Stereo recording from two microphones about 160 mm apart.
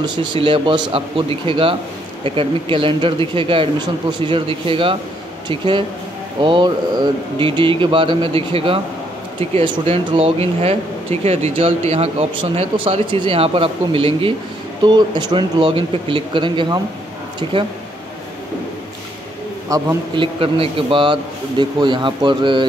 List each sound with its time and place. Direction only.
0.0 s speech: 30° right (ahead or behind)
19.7 s speech: 20° right (ahead or behind)
20.2 s speech: 35° right (ahead or behind)